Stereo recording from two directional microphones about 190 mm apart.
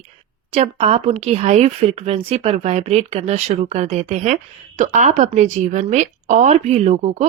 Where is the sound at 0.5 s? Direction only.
30° right (ahead or behind).